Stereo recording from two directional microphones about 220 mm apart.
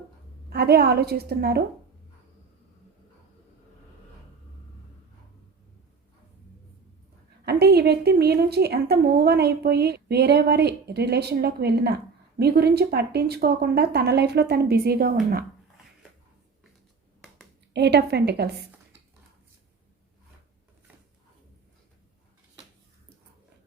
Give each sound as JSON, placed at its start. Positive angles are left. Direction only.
{"t": 0.5, "sound": "a woman's voice", "side_deg": -45}
{"t": 7.4, "sound": "a woman's voice", "side_deg": -45}
{"t": 17.7, "sound": "a woman's voice", "side_deg": -50}